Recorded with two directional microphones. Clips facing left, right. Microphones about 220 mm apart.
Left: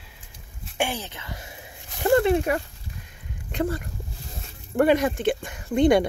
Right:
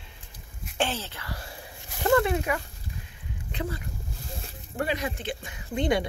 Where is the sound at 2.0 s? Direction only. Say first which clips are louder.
Left 4 dB; 25° left (ahead or behind).